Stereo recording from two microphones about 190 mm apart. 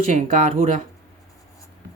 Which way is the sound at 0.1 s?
40° right (ahead or behind).